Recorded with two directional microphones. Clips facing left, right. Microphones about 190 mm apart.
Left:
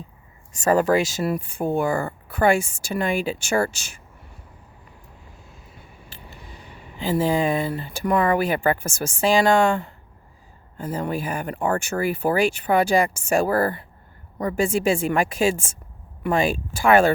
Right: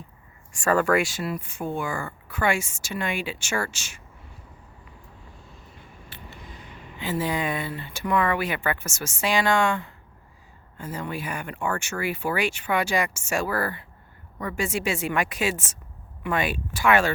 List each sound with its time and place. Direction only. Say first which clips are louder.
0.5 s speech: left 4 dB; 20° left (ahead or behind)
0.8 s speech: left 3 dB; 35° left (ahead or behind)
7.0 s speech: left 6 dB; 30° left (ahead or behind)